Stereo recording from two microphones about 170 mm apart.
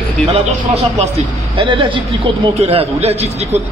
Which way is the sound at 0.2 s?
5° left (ahead or behind).